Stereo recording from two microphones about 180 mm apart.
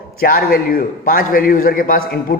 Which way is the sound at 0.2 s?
55° left (ahead or behind).